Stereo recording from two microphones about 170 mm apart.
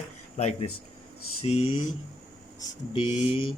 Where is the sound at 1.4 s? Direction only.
35° left (ahead or behind).